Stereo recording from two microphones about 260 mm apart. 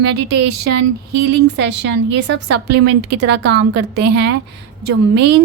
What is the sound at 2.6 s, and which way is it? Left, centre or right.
Speech, right.